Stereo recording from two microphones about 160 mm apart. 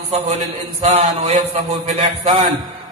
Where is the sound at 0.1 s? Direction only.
40° right (ahead or behind).